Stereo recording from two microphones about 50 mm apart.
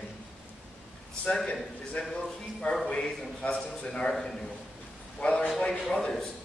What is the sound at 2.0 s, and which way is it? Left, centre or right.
A man's voice, centre.